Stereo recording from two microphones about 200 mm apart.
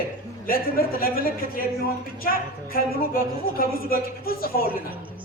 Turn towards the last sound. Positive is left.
turn(degrees=45)  # may be behind; listen again after turning